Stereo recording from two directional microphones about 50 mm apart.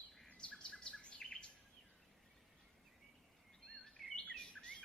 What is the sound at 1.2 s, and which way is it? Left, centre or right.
Bird vocalization, centre.